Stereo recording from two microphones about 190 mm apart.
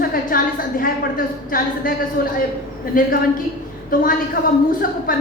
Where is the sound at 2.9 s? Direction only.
45° left (ahead or behind).